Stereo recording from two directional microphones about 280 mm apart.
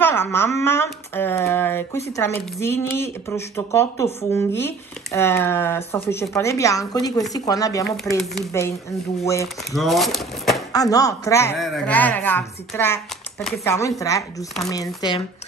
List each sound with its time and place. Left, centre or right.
0.0 s speech: centre
9.7 s speech: centre
10.7 s speech: centre